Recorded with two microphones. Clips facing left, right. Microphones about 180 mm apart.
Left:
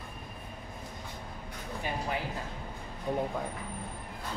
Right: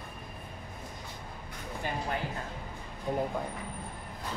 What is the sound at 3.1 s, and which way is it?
Speech, centre (ahead or behind).